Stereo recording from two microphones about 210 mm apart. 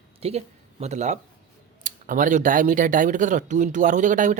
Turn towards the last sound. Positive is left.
turn(degrees=-35)  # may be behind; listen again after turning